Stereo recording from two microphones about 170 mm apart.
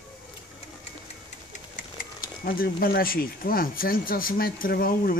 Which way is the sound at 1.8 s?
55° left (ahead or behind).